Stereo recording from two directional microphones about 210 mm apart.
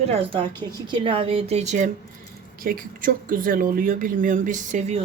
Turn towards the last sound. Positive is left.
turn(degrees=-35)  # may be behind; listen again after turning